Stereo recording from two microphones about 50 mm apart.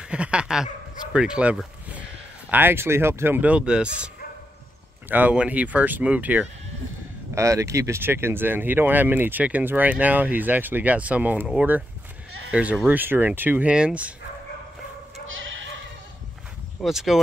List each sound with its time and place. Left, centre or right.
0.0 s speech: right
2.5 s speech: right
3.3 s speech: right
5.0 s speech: right
5.3 s speech: right
7.3 s speech: right
8.0 s speech: right
12.8 s speech: right
13.7 s speech: right
16.8 s speech: centre